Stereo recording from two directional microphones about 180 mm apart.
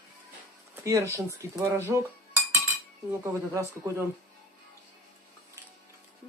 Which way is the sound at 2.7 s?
15° right (ahead or behind).